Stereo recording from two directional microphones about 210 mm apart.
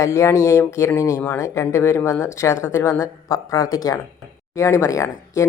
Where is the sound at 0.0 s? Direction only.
15° left (ahead or behind).